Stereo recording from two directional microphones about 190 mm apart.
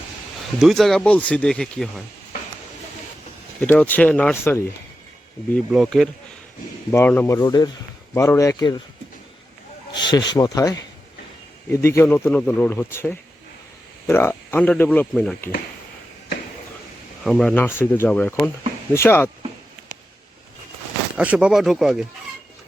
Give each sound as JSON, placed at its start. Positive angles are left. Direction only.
{"t": 0.6, "sound": "speech", "side_deg": 0}
{"t": 3.6, "sound": "speech", "side_deg": 10}
{"t": 5.7, "sound": "speech", "side_deg": 0}
{"t": 6.9, "sound": "speech", "side_deg": 10}
{"t": 9.9, "sound": "speech", "side_deg": 25}
{"t": 17.2, "sound": "speech", "side_deg": 5}
{"t": 21.2, "sound": "speech", "side_deg": -5}